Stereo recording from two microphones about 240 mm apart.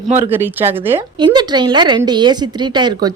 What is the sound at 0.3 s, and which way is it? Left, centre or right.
A woman's voice, centre.